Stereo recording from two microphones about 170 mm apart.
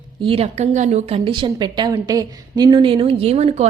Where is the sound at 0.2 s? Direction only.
35° right (ahead or behind).